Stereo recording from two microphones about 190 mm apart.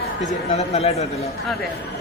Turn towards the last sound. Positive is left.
turn(degrees=35)  # may be behind; listen again after turning